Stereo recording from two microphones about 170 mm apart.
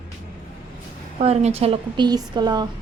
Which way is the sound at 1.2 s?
40° right (ahead or behind).